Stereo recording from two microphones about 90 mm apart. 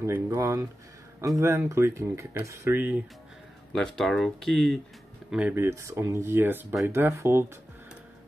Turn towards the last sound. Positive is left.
turn(degrees=-30)  # may be behind; listen again after turning